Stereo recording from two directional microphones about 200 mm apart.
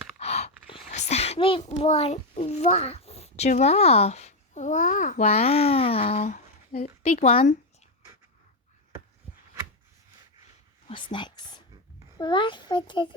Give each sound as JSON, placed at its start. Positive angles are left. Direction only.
{"t": 0.2, "sound": "a child's voice", "side_deg": 30}
{"t": 7.0, "sound": "a child's voice", "side_deg": 30}
{"t": 10.8, "sound": "a child's voice", "side_deg": 25}